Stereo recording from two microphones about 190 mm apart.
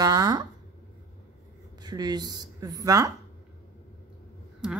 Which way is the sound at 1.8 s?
20° right (ahead or behind).